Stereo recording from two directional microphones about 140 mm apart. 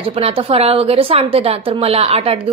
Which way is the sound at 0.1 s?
45° right (ahead or behind).